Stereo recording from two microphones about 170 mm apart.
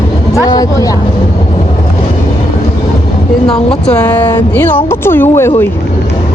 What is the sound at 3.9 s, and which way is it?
Speech, 10° left (ahead or behind).